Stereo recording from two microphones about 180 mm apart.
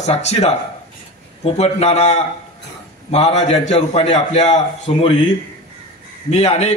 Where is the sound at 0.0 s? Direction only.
40° left (ahead or behind).